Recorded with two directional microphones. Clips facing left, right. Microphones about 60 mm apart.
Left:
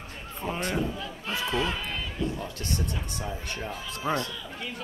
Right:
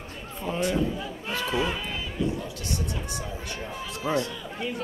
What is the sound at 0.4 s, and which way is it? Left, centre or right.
Speech, left.